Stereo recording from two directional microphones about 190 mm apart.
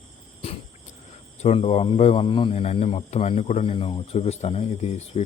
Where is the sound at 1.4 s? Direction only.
35° left (ahead or behind).